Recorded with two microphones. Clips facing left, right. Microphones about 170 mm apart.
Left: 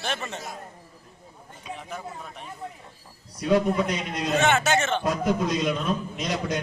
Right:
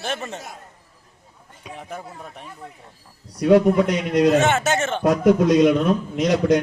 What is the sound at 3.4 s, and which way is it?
Speech, 65° right (ahead or behind).